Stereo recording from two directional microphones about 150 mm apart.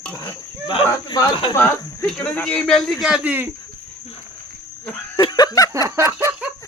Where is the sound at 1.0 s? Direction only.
30° left (ahead or behind).